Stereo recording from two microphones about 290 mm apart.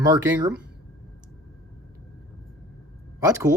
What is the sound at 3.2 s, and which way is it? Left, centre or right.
Speech, centre.